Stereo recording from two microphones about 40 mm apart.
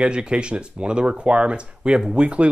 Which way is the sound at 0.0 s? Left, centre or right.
Right.